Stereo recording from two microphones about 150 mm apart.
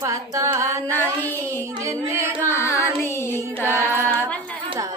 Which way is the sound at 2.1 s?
15° right (ahead or behind).